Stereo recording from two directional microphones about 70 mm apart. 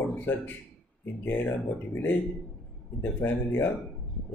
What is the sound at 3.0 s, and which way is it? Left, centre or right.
Speech, left.